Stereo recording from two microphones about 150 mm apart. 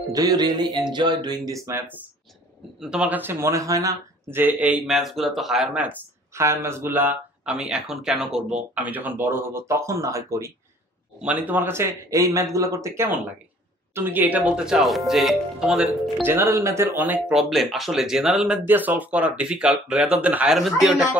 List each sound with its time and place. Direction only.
0.1 s speech: 25° right (ahead or behind)
2.8 s speech: 5° right (ahead or behind); by 10.5 s 20° right (ahead or behind)
11.1 s speech: 10° right (ahead or behind)
16.3 s speech: 20° right (ahead or behind)